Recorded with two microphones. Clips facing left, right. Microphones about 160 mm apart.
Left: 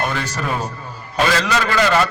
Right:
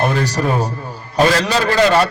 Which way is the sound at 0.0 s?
35° right (ahead or behind).